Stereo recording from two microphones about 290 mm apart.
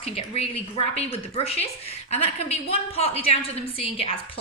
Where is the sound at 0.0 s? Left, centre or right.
Left.